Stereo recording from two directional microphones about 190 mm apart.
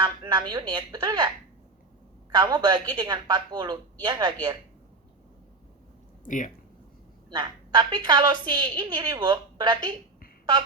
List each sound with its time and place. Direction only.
0.0 s a woman's voice: 20° right (ahead or behind)
2.3 s a woman's voice: 20° right (ahead or behind)
6.2 s speech: 40° left (ahead or behind)
7.3 s a woman's voice: 20° right (ahead or behind)